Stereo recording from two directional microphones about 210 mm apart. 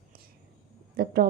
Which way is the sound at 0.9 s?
45° right (ahead or behind).